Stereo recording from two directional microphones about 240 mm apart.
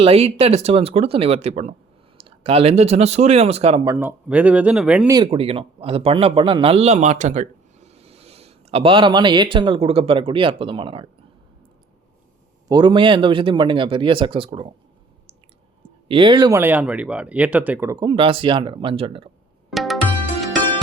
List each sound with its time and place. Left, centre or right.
0.0 s a man's voice: right
3.9 s speech: centre
5.1 s a man's voice: centre
12.6 s a man's voice: centre
16.0 s speech: right
19.7 s music: centre